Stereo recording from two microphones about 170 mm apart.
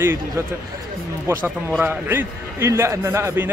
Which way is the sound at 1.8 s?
10° right (ahead or behind).